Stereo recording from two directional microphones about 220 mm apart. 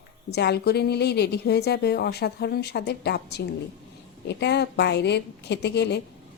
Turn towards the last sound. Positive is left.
turn(degrees=50)  # may be behind; listen again after turning